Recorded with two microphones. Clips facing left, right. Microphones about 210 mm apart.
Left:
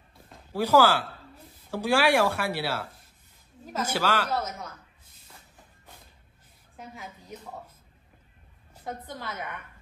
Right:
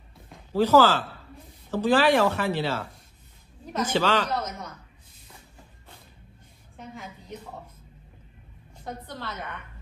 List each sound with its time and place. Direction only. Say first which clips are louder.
0.5 s a woman's voice: right 2 dB; 10° left (ahead or behind)
6.8 s a woman's voice: right 2 dB; 5° left (ahead or behind)
8.7 s speech: even; 10° left (ahead or behind)